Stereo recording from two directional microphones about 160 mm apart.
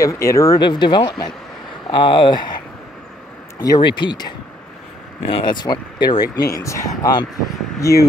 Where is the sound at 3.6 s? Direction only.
25° left (ahead or behind).